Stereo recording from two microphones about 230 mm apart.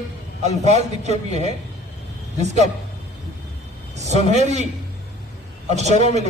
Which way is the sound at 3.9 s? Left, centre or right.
Right.